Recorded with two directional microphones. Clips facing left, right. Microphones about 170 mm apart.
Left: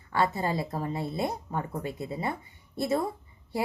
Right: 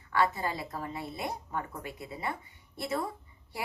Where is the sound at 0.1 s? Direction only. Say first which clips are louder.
Left 2 dB; 25° left (ahead or behind).